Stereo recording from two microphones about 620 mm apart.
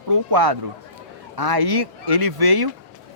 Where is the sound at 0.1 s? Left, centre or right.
Right.